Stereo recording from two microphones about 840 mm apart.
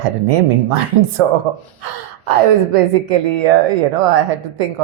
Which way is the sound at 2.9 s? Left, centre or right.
Right.